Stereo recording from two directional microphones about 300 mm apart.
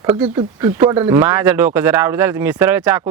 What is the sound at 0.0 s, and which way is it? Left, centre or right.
Speech, centre.